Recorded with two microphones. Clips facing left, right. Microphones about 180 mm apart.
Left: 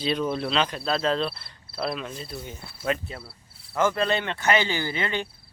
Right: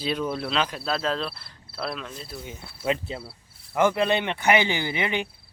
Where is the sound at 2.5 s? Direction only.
20° right (ahead or behind).